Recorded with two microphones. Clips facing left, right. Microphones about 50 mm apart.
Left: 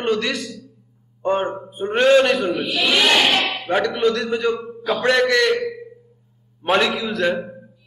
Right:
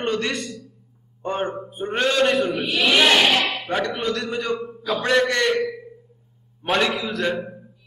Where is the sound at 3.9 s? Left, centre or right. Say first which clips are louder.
Left 5 dB; centre.